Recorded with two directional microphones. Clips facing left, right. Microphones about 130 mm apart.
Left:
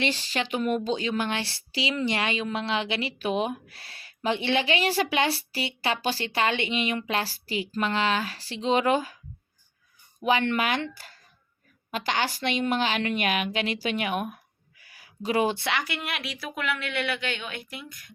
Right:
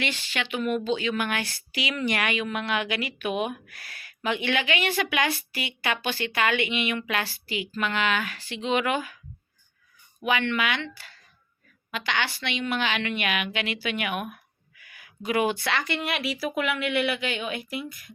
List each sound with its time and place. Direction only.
0.0 s speech: 35° left (ahead or behind)
10.2 s a woman's voice: 40° left (ahead or behind)
15.7 s a woman's voice: 5° left (ahead or behind)